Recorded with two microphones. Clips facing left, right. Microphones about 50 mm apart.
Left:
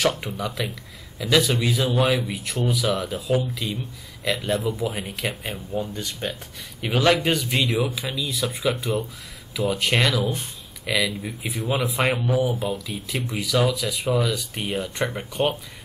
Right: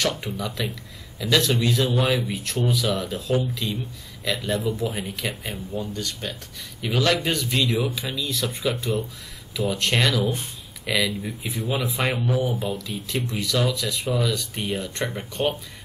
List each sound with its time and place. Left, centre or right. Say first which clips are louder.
0.5 s a man's voice: even; centre
7.2 s speech: left 1 dB; centre